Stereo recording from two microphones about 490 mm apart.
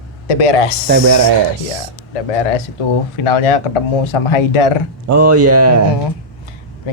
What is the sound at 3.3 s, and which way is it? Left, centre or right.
A man's voice, left.